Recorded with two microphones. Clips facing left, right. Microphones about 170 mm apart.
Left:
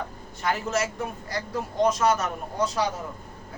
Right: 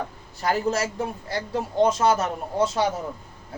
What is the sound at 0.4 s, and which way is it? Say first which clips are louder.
A man's voice: right 3 dB; 35° right (ahead or behind).